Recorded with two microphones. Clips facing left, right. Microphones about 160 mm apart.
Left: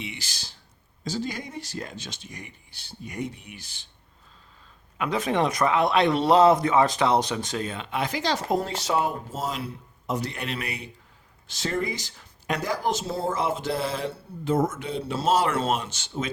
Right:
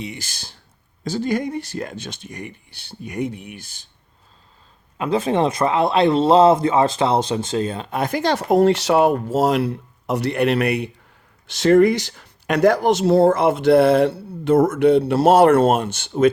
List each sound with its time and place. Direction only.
0.0 s speech: 45° right (ahead or behind)
4.9 s speech: 30° right (ahead or behind); by 16.3 s 60° right (ahead or behind)